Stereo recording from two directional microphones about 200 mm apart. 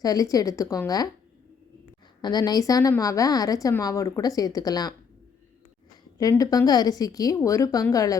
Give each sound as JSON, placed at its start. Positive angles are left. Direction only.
{"t": 0.0, "sound": "speech", "side_deg": 15}
{"t": 2.2, "sound": "speech", "side_deg": 20}
{"t": 6.1, "sound": "speech", "side_deg": 15}